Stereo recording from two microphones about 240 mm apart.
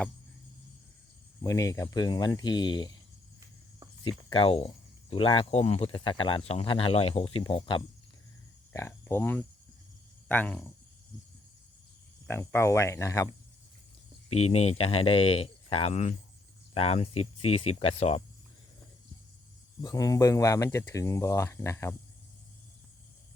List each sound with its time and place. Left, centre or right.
1.4 s speech: centre
4.3 s speech: left
8.7 s speech: centre
12.3 s speech: centre
14.3 s speech: left
19.8 s speech: centre